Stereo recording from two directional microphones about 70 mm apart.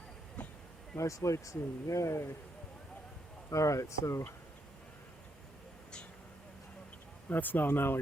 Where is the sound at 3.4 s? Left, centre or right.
Left.